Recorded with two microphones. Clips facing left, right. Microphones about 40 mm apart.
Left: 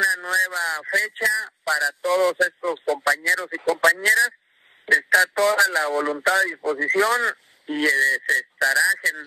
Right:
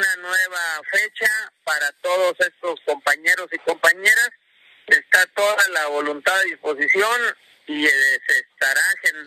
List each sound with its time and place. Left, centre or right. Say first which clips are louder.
0.0 s a sound: right 1 dB; right
3.5 s radio: right 1 dB; right
6.2 s speech: right 1 dB; right